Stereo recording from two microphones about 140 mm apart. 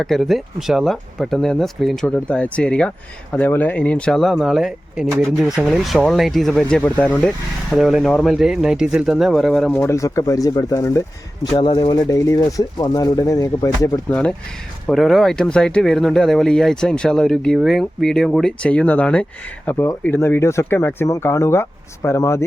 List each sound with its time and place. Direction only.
0.0 s speech: centre (ahead or behind)
9.7 s speech: 20° left (ahead or behind)
11.5 s speech: 35° left (ahead or behind)
14.1 s speech: 10° left (ahead or behind)